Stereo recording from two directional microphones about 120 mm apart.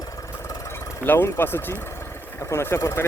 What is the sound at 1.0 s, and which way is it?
Speech, 20° left (ahead or behind).